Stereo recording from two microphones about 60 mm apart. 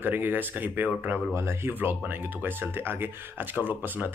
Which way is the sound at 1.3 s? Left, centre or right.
Right.